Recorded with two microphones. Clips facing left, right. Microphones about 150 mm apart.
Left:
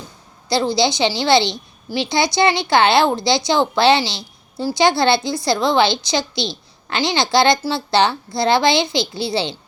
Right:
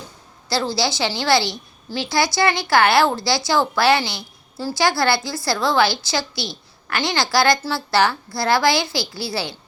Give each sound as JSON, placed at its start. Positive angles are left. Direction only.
{"t": 0.4, "sound": "a woman's voice", "side_deg": 20}